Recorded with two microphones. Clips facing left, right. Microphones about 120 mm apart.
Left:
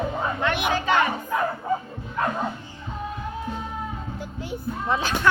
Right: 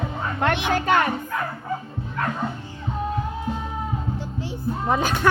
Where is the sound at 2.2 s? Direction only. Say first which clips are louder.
Left 1 dB; 20° left (ahead or behind).